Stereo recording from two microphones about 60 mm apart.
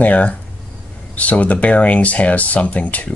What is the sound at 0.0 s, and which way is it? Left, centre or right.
Speech, left.